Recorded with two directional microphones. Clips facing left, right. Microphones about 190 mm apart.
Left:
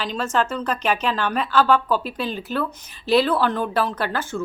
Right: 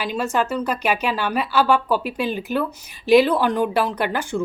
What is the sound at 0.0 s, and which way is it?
Speech, 10° right (ahead or behind).